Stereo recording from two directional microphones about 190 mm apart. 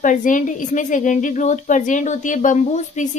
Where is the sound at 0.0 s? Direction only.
40° left (ahead or behind).